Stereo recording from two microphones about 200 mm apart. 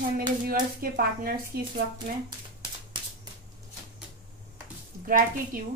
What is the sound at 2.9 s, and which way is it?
Shuffling cards, 25° right (ahead or behind).